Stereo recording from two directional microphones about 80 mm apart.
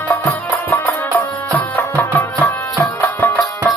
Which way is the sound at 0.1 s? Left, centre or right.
Left.